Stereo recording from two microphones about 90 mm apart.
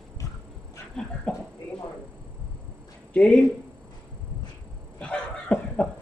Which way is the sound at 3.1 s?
15° left (ahead or behind).